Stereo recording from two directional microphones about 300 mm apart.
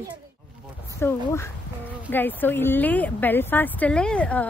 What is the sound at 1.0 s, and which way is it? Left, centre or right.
A woman's voice, centre.